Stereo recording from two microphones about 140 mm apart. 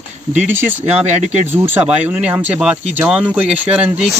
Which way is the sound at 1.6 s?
10° right (ahead or behind).